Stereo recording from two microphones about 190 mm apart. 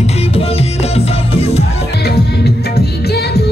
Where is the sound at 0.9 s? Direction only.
30° left (ahead or behind).